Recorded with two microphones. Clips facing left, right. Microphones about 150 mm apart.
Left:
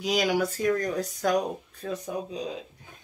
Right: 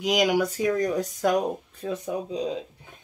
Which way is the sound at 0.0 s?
20° right (ahead or behind).